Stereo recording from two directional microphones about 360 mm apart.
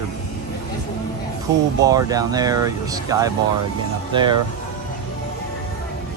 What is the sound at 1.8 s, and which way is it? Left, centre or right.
Speech, centre.